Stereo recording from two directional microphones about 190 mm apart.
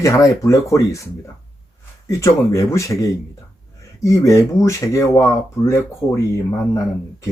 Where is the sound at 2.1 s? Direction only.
15° left (ahead or behind).